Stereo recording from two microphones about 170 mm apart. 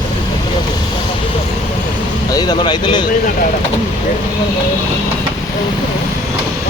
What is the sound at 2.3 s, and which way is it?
Speech, 25° left (ahead or behind).